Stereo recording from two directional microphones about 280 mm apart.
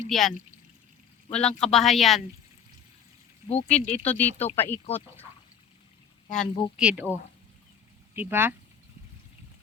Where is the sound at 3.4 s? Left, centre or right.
Left.